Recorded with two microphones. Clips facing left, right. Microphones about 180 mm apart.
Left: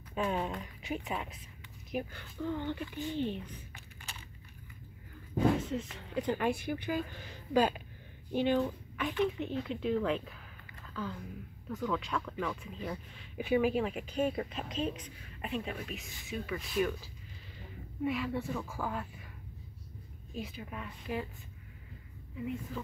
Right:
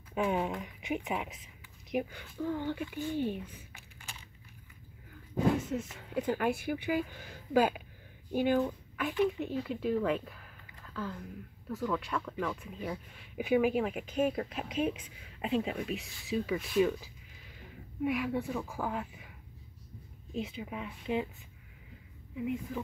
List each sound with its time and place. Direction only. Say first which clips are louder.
0.1 s speech: right 2 dB; 10° right (ahead or behind)
5.6 s speech: right 1 dB; 10° right (ahead or behind)
15.4 s speech: right 6 dB; 20° right (ahead or behind)
18.0 s speech: right 2 dB; 10° right (ahead or behind)
20.3 s speech: right 4 dB; 25° right (ahead or behind)
22.4 s speech: right 3 dB; 15° right (ahead or behind)